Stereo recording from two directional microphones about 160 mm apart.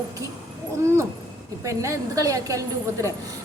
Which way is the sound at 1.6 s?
20° right (ahead or behind).